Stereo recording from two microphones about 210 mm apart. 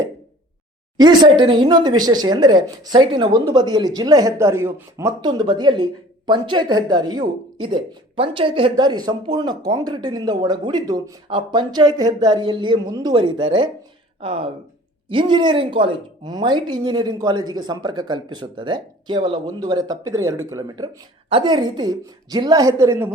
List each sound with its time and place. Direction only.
0.9 s speech: 20° right (ahead or behind)